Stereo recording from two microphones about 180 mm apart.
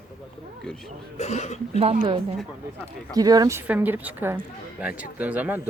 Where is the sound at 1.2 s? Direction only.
40° left (ahead or behind).